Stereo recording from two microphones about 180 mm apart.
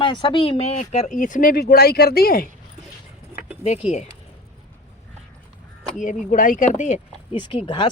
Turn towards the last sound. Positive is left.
turn(degrees=25)  # may be behind; listen again after turning